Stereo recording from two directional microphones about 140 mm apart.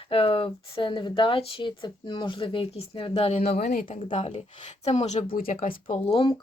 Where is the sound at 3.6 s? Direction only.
90° left.